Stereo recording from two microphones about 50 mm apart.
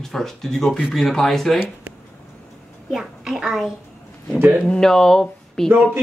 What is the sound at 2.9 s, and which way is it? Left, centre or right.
Speech, centre.